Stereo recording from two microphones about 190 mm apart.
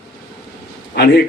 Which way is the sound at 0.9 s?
55° left (ahead or behind).